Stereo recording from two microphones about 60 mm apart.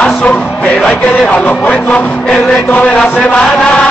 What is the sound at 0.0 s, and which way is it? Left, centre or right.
Music, left.